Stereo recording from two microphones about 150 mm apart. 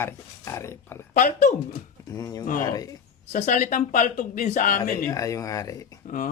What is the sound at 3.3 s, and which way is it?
Speech, 60° left (ahead or behind).